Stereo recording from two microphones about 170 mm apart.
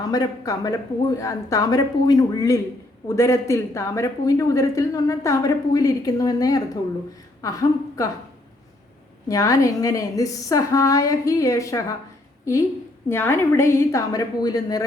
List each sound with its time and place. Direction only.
0.1 s a man's voice: 20° left (ahead or behind)
9.3 s a man's voice: 20° left (ahead or behind)
13.1 s a woman's voice: 15° left (ahead or behind)